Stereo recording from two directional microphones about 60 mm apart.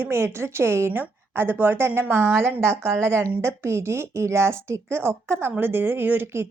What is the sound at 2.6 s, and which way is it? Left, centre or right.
A woman's voice, right.